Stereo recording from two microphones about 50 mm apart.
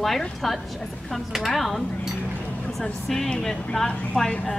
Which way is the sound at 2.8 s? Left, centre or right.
Centre.